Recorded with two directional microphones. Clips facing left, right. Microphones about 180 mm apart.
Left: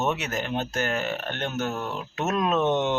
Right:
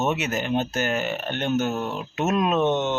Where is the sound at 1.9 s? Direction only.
5° right (ahead or behind).